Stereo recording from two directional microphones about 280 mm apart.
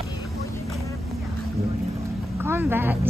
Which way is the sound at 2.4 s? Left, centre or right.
Centre.